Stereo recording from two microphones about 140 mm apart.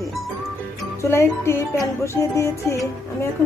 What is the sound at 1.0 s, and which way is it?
A woman's voice, 20° left (ahead or behind).